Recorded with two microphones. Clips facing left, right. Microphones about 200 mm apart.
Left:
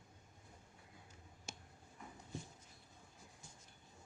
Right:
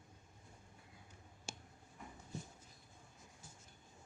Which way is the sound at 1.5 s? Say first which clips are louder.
Right 3 dB; 30° right (ahead or behind).